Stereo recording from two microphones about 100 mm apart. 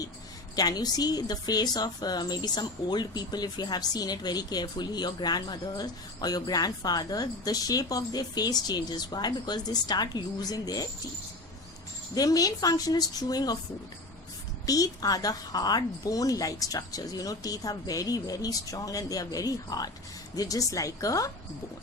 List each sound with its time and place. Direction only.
0.5 s a woman's voice: 40° left (ahead or behind)
12.1 s a woman's voice: 40° left (ahead or behind)
14.7 s a woman's voice: 40° left (ahead or behind)